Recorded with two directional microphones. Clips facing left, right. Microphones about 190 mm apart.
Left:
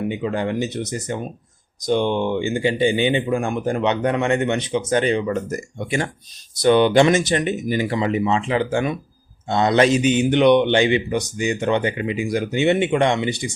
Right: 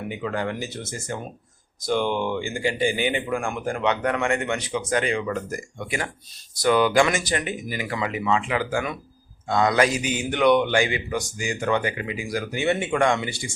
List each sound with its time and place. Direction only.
0.1 s speech: 20° left (ahead or behind)